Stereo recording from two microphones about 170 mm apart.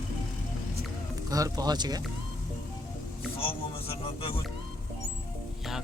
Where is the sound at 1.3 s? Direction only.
20° right (ahead or behind).